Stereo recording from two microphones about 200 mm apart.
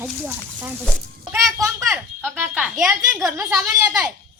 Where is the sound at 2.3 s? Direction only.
5° right (ahead or behind).